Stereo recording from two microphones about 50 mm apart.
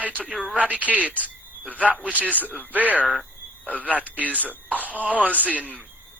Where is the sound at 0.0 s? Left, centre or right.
Right.